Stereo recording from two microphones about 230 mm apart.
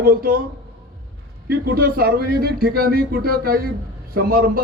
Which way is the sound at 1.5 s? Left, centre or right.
Right.